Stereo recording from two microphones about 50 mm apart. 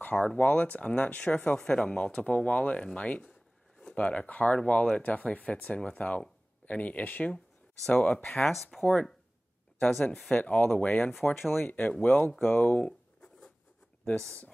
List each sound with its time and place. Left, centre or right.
0.0 s speech: left
1.6 s speech: centre
8.7 s speech: centre
9.8 s speech: left
12.6 s a sound: left